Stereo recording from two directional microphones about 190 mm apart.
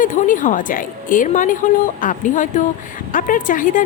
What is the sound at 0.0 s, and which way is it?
Speech, 45° left (ahead or behind).